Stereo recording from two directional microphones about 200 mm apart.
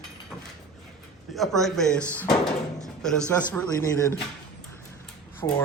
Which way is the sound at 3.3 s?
10° left (ahead or behind).